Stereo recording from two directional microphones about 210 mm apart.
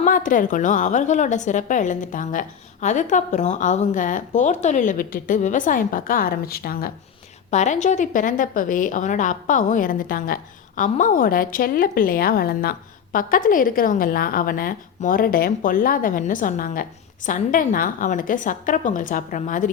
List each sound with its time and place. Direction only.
0.0 s a woman's voice: 40° left (ahead or behind)
7.5 s a woman's voice: 35° left (ahead or behind)